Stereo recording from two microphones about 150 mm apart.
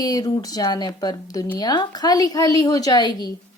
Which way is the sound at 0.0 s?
25° left (ahead or behind).